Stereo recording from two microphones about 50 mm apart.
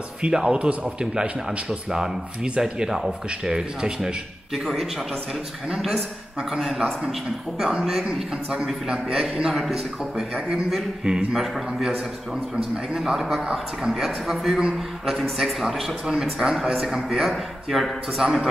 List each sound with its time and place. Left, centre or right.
0.2 s a man's voice: centre
6.6 s a man's voice: centre
8.1 s a man's voice: centre
13.0 s a man's voice: centre